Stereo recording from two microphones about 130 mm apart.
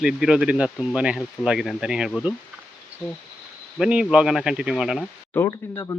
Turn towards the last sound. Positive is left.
turn(degrees=25)  # may be behind; listen again after turning